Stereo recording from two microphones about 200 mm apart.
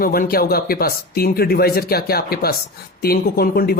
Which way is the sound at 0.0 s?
45° left (ahead or behind).